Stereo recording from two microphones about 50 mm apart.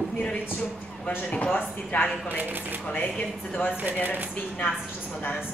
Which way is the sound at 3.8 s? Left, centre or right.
Right.